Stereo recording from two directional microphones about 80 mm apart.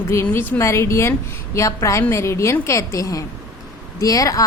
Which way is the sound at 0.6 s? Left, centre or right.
Left.